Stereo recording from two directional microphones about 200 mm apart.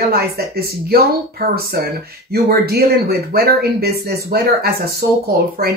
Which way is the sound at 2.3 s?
50° right (ahead or behind).